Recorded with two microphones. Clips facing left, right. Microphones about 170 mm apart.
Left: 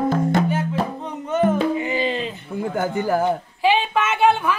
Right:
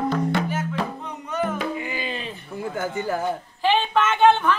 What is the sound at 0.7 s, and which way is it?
Speech, 30° left (ahead or behind).